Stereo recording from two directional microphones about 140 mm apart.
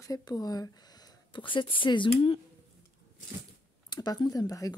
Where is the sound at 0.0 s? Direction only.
25° left (ahead or behind).